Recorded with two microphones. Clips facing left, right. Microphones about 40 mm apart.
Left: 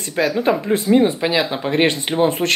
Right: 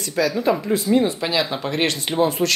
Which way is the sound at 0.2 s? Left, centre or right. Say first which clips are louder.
Left 2 dB; left.